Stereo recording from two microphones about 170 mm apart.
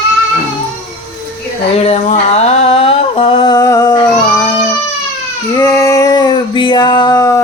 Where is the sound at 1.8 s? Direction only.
40° left (ahead or behind); by 4.0 s 20° left (ahead or behind).